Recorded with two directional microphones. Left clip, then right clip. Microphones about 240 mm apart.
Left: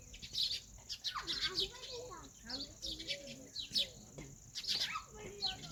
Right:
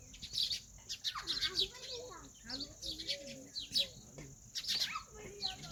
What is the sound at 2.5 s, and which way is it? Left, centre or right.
Bird, centre.